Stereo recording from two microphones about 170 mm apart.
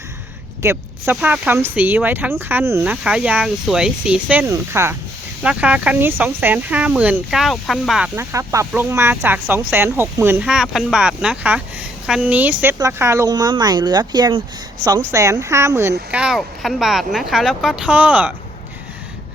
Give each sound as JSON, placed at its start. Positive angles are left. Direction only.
{"t": 0.6, "sound": "speech", "side_deg": -15}
{"t": 8.1, "sound": "speech", "side_deg": -15}
{"t": 16.1, "sound": "speech", "side_deg": -5}